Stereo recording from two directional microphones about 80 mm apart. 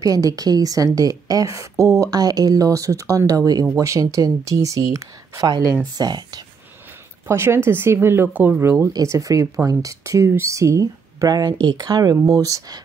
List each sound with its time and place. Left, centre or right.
0.0 s a woman's voice: right
5.9 s speech: right
7.2 s speech: right
8.9 s a woman's voice: right